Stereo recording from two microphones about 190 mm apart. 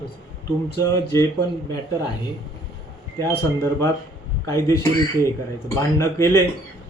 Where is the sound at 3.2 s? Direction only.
15° left (ahead or behind).